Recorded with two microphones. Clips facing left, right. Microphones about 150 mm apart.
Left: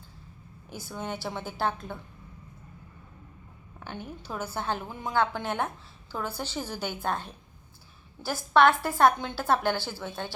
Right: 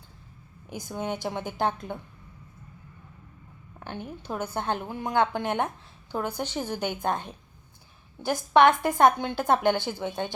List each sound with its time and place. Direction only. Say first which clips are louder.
0.7 s a woman's voice: right 4 dB; 15° right (ahead or behind)
3.8 s a sound: right 2 dB; 10° right (ahead or behind)
4.8 s a woman's voice: right 2 dB; 15° right (ahead or behind)